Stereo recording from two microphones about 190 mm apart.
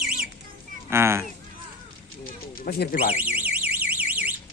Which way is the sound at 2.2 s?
55° left (ahead or behind).